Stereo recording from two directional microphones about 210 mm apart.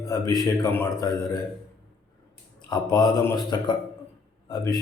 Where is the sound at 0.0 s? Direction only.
15° left (ahead or behind).